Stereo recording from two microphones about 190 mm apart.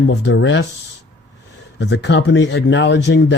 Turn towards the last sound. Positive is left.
turn(degrees=70)  # may be behind; listen again after turning